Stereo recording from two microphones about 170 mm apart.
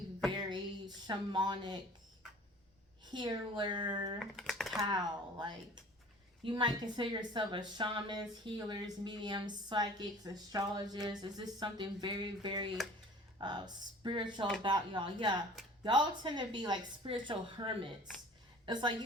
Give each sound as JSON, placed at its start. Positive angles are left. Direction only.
{"t": 0.3, "sound": "chopping", "side_deg": -25}
{"t": 3.0, "sound": "speech", "side_deg": -25}
{"t": 4.4, "sound": "typing", "side_deg": 0}
{"t": 4.9, "sound": "a woman's voice", "side_deg": -25}